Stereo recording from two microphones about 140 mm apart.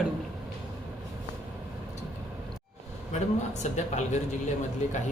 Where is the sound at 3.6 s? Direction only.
55° left (ahead or behind).